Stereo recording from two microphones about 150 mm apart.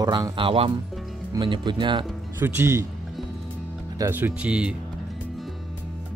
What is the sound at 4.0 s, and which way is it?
Speech, 15° right (ahead or behind).